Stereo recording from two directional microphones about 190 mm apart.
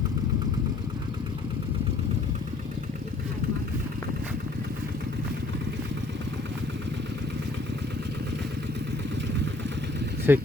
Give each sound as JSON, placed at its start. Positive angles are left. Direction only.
{"t": 10.3, "sound": "speech", "side_deg": -10}